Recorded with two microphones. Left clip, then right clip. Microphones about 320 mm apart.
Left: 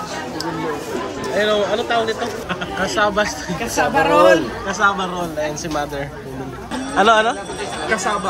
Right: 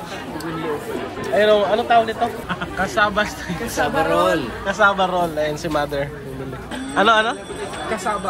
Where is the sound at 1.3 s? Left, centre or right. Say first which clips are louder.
Right 3 dB; centre.